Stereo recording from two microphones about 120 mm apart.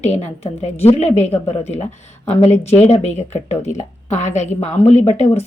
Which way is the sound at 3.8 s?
80° left.